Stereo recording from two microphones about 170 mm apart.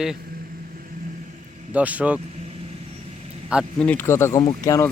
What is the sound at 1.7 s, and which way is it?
Speech, 10° right (ahead or behind).